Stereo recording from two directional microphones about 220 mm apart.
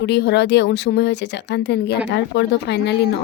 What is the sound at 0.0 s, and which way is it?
Speech, 50° left (ahead or behind).